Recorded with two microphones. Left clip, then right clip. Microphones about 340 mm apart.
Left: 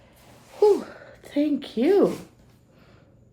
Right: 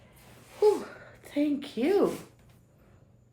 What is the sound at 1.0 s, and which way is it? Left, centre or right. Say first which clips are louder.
A woman's voice: left 3 dB; left.